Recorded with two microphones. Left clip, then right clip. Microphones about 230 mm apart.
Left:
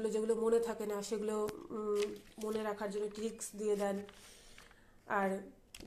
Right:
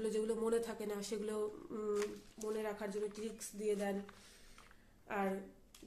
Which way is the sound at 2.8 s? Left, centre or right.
Centre.